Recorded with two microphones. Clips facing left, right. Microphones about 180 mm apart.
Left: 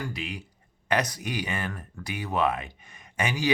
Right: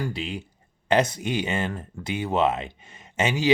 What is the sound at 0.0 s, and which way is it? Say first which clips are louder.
Speech: right 5 dB; 30° right (ahead or behind).